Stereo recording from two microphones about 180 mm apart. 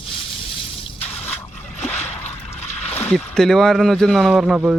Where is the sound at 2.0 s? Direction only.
35° left (ahead or behind).